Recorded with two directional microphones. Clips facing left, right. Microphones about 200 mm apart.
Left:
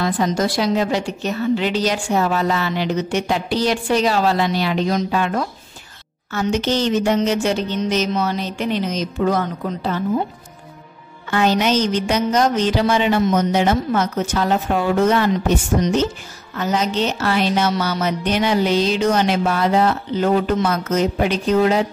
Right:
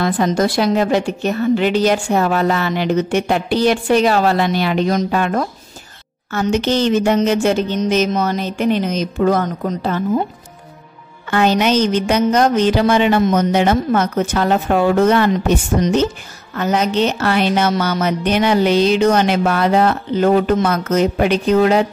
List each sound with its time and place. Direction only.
0.0 s a woman's voice: 55° right (ahead or behind)
11.2 s a woman's voice: 60° right (ahead or behind)